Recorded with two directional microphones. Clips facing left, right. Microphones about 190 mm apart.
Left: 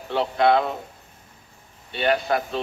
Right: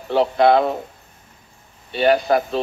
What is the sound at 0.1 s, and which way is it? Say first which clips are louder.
Speech: right 5 dB; 35° right (ahead or behind).